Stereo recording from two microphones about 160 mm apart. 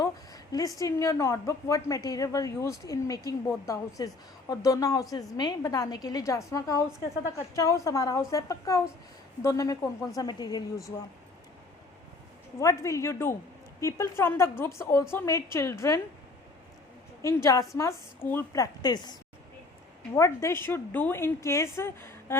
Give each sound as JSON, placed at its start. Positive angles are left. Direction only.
{"t": 0.0, "sound": "a sound", "side_deg": 20}
{"t": 0.8, "sound": "a woman's voice", "side_deg": 20}
{"t": 12.5, "sound": "a woman's voice", "side_deg": 20}
{"t": 17.2, "sound": "a woman's voice", "side_deg": 20}
{"t": 20.1, "sound": "a woman's voice", "side_deg": 20}